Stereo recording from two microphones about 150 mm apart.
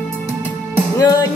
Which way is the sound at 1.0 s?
25° left (ahead or behind).